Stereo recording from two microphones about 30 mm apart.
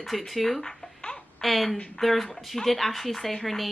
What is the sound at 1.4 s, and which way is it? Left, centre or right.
Speech, centre.